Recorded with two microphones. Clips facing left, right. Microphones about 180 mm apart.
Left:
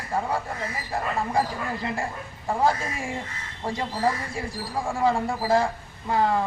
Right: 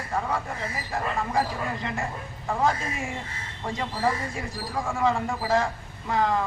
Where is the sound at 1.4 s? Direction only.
35° left (ahead or behind).